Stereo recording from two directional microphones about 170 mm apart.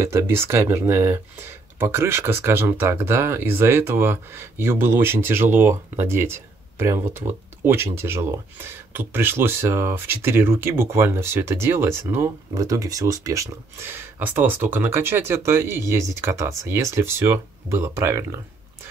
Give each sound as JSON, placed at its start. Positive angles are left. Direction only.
{"t": 0.0, "sound": "speech", "side_deg": -15}